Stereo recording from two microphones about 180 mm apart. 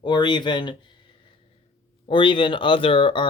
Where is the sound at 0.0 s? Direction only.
25° left (ahead or behind).